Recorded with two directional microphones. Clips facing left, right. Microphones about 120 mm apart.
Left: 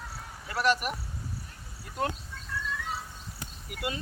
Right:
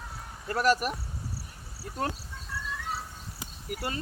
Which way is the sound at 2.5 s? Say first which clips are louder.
Left 1 dB; 5° right (ahead or behind).